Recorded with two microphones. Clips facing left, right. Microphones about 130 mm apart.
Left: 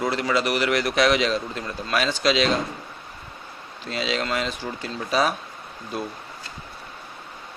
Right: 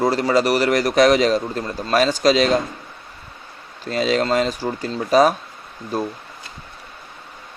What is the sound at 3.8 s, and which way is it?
Speech, 45° right (ahead or behind).